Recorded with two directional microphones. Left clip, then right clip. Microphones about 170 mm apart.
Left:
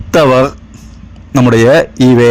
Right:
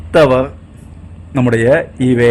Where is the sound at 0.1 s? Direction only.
25° left (ahead or behind).